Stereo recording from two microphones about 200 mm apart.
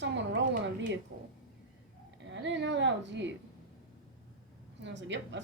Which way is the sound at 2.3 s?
60° right (ahead or behind).